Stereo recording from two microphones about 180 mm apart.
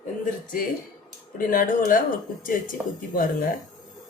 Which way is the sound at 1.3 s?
50° left (ahead or behind).